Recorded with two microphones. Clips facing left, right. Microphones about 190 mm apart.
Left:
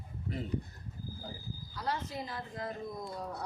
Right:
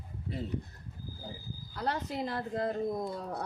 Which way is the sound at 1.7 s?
60° right (ahead or behind).